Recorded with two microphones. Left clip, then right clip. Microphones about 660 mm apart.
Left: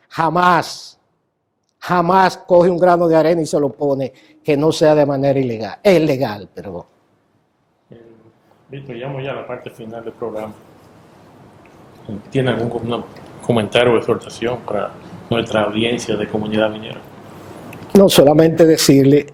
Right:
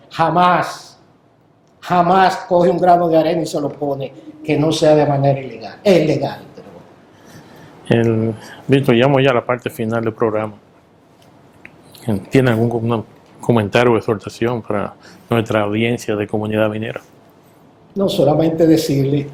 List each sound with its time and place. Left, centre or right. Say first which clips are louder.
0.1 s a man's voice: right 1 dB; left
1.8 s a man's voice: right 1 dB; left
9.0 s speech: right 13 dB; right
12.3 s speech: right 3 dB; right
13.5 s speech: even; right
15.3 s speech: even; right
18.0 s speech: left 4 dB; left